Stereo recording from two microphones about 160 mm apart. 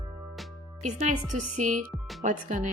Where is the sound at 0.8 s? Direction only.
45° right (ahead or behind).